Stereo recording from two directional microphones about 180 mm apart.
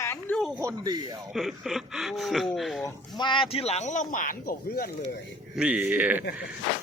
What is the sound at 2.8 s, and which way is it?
Speech, 25° left (ahead or behind).